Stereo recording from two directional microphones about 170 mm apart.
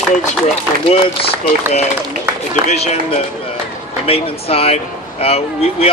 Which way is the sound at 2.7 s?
40° left (ahead or behind).